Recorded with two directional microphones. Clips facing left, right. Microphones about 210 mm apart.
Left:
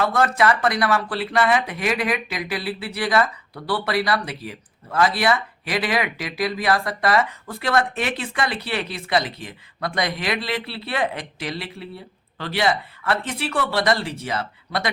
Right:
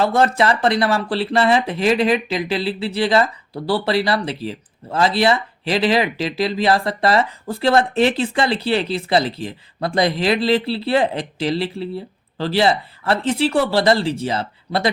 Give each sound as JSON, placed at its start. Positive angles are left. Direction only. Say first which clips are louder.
{"t": 0.0, "sound": "speech", "louder": "right 3 dB", "side_deg": -30}